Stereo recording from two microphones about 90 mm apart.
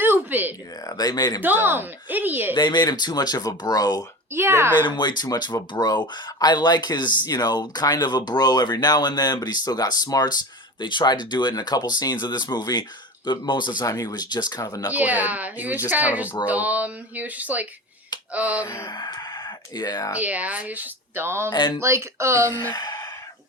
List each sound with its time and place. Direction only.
0.0 s a sound: 20° right (ahead or behind)
0.9 s speech: 45° left (ahead or behind)
1.6 s speech: 20° right (ahead or behind)
2.6 s speech: 55° left (ahead or behind)
4.3 s speech: 30° right (ahead or behind)
4.8 s speech: 60° left (ahead or behind)
13.8 s speech: 40° left (ahead or behind)
14.8 s speech: 20° right (ahead or behind)
18.6 s speech: 30° left (ahead or behind)
18.9 s speech: 50° left (ahead or behind)
20.1 s speech: 15° right (ahead or behind); by 22.5 s 30° right (ahead or behind)
22.7 s speech: 50° left (ahead or behind)